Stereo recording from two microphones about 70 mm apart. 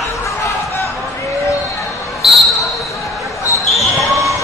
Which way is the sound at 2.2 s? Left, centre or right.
Centre.